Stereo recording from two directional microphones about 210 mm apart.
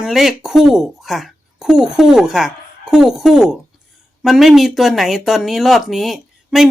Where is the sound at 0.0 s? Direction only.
Centre (ahead or behind).